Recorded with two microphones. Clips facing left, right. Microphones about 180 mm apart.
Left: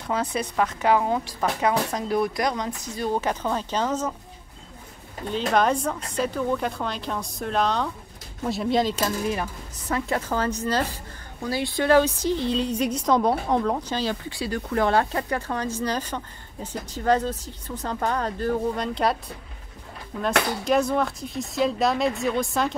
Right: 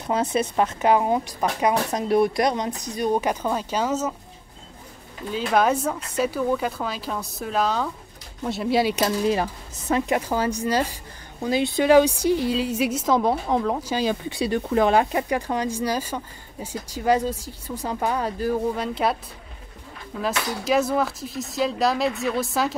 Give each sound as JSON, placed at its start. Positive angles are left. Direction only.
{"t": 0.0, "sound": "a woman's voice", "side_deg": -20}
{"t": 5.5, "sound": "speech", "side_deg": -5}
{"t": 9.0, "sound": "a woman's voice", "side_deg": -30}
{"t": 20.6, "sound": "speech", "side_deg": -5}